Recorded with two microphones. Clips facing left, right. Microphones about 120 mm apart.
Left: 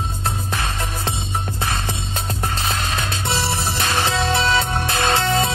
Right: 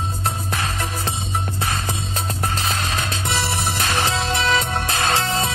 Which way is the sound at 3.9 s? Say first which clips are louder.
Left 3 dB; 35° right (ahead or behind).